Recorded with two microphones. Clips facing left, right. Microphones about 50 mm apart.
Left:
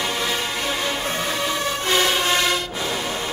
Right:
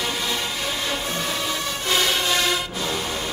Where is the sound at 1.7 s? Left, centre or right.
Centre.